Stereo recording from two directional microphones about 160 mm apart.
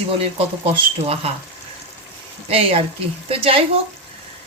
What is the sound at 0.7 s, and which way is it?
Speech, 40° right (ahead or behind).